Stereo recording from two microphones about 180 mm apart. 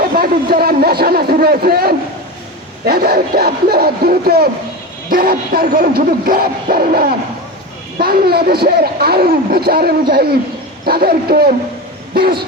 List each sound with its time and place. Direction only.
0.0 s a man's voice: 55° right (ahead or behind)